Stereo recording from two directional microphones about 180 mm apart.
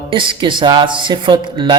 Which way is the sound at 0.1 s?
30° right (ahead or behind).